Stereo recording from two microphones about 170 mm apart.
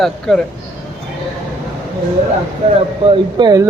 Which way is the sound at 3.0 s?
30° right (ahead or behind).